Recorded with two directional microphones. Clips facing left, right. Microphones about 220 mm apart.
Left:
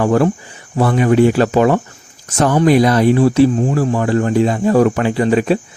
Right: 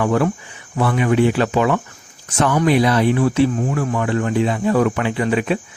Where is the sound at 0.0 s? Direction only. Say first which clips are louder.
Left 4 dB; 40° left (ahead or behind).